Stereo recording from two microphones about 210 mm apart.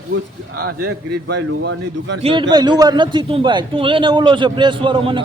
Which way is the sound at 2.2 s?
25° right (ahead or behind).